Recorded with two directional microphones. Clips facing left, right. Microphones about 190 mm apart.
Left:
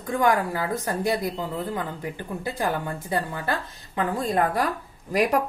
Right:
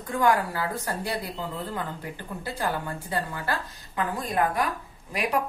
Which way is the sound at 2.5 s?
15° left (ahead or behind).